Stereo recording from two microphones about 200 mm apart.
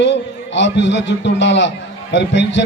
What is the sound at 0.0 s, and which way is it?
A man's voice, 60° left (ahead or behind).